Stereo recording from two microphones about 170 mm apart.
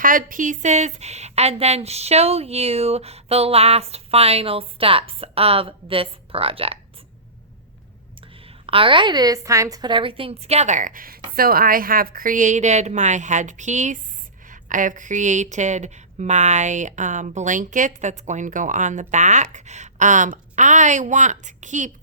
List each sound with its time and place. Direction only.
0.0 s a woman's voice: 55° right (ahead or behind); by 6.7 s 35° right (ahead or behind)
8.2 s a woman's voice: 35° right (ahead or behind)